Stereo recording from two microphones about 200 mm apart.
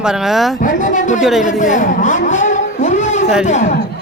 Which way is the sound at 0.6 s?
40° left (ahead or behind).